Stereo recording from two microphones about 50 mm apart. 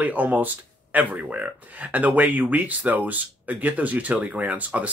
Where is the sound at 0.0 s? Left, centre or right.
Right.